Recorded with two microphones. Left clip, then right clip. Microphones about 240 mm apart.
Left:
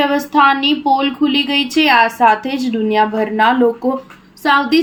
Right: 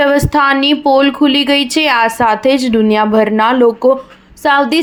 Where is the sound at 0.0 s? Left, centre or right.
Right.